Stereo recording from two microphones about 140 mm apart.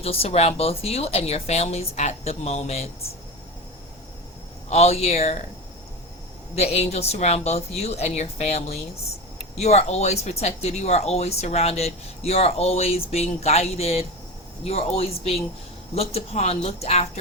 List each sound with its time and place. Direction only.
0.0 s speech: 45° left (ahead or behind)
4.7 s speech: 50° left (ahead or behind)
6.6 s speech: 50° left (ahead or behind)